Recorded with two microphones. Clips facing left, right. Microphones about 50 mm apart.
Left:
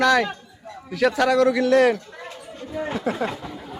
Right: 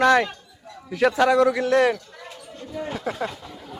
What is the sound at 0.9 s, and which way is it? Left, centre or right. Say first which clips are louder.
Speech: right 1 dB; right.